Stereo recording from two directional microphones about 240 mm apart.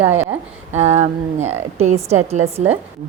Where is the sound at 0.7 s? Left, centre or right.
Right.